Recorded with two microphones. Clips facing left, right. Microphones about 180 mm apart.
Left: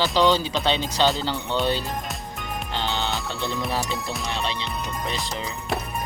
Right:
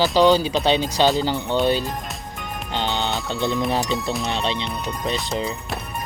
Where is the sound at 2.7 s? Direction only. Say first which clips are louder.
Right 4 dB; 20° right (ahead or behind).